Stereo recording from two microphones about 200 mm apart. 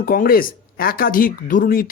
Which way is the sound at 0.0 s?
45° left (ahead or behind).